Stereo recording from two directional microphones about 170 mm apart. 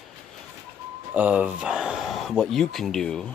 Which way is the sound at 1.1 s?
10° right (ahead or behind).